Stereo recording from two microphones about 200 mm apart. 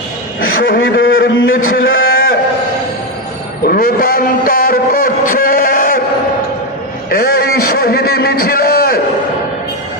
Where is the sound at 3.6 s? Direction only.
45° left (ahead or behind).